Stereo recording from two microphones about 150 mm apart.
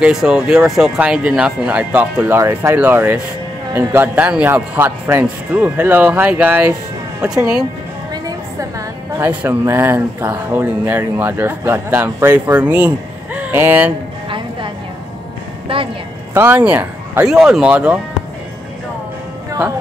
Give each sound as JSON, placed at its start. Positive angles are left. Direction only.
{"t": 0.0, "sound": "speech", "side_deg": -5}
{"t": 8.1, "sound": "music", "side_deg": -25}
{"t": 9.3, "sound": "speech", "side_deg": -10}
{"t": 16.3, "sound": "speech", "side_deg": -10}